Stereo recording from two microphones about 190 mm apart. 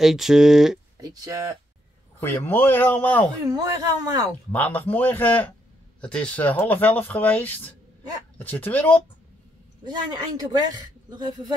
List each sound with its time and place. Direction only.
0.0 s speech: centre (ahead or behind)
0.9 s speech: 20° right (ahead or behind)
2.1 s speech: 10° left (ahead or behind)
3.4 s speech: 20° right (ahead or behind)
4.5 s speech: 10° left (ahead or behind)
9.8 s speech: 20° right (ahead or behind)